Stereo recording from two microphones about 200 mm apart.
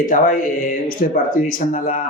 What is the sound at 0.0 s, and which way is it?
Speech, 45° left (ahead or behind).